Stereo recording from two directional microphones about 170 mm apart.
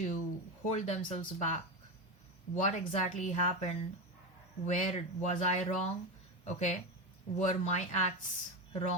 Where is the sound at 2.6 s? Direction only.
45° left (ahead or behind).